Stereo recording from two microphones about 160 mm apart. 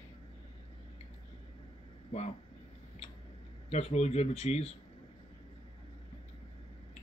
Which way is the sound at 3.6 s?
40° left (ahead or behind).